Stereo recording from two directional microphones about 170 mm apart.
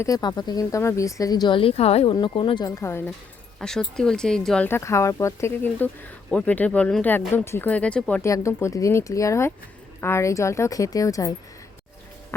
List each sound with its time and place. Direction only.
0.0 s speech: 20° left (ahead or behind)
3.6 s speech: 5° left (ahead or behind); by 11.3 s 20° left (ahead or behind)